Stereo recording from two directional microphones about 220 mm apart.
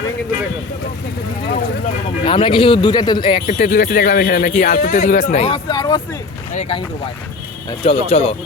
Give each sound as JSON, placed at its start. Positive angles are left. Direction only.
{"t": 2.2, "sound": "speech", "side_deg": 25}
{"t": 3.4, "sound": "speech", "side_deg": 35}